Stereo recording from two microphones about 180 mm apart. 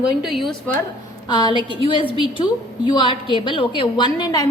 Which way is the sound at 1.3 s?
25° left (ahead or behind).